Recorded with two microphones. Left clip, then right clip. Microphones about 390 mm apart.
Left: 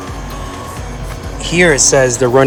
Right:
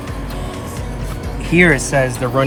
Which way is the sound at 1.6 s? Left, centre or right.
Centre.